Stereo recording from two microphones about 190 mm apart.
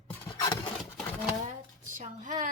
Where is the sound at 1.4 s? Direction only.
40° right (ahead or behind).